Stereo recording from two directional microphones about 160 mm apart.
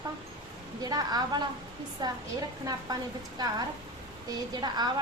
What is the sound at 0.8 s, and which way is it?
A woman's voice, 25° right (ahead or behind).